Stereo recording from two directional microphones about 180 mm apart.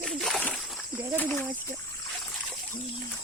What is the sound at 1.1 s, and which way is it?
Speech, 10° left (ahead or behind).